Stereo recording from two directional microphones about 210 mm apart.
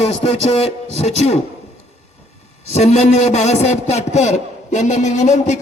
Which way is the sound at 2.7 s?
30° left (ahead or behind).